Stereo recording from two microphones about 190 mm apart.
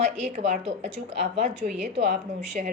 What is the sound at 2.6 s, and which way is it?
Speech, 45° right (ahead or behind).